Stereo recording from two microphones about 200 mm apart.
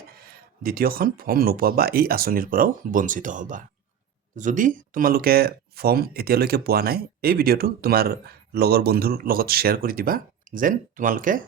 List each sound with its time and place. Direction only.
0.3 s speech: 45° right (ahead or behind)